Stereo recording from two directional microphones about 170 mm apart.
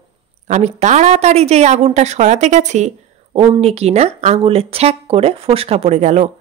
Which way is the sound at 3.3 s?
30° right (ahead or behind).